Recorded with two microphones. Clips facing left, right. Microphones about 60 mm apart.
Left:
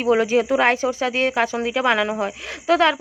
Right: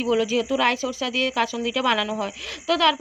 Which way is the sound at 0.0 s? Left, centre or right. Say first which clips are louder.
Left 4 dB; left.